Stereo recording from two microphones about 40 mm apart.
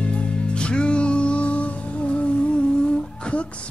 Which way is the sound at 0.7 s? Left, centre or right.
Left.